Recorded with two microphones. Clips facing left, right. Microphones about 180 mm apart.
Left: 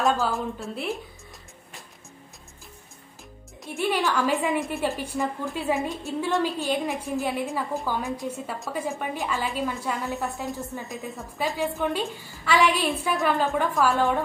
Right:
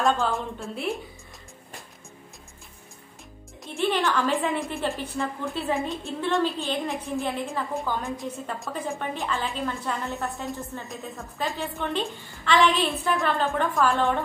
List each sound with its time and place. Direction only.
0.0 s a woman's voice: centre (ahead or behind)
3.6 s a woman's voice: 5° left (ahead or behind)